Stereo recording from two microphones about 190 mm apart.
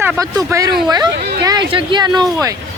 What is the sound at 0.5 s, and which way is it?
Speech, 20° right (ahead or behind).